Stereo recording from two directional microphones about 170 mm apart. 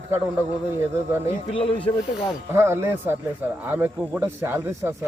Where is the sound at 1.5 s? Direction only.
30° left (ahead or behind).